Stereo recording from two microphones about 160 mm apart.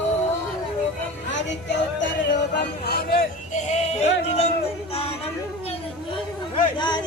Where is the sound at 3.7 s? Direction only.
45° left (ahead or behind).